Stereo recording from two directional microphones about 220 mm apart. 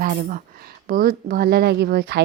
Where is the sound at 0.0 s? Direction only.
40° right (ahead or behind).